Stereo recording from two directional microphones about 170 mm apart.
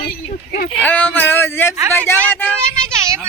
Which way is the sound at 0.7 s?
10° left (ahead or behind).